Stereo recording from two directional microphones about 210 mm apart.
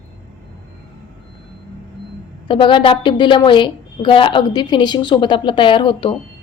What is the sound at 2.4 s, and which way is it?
A woman's voice, 25° left (ahead or behind).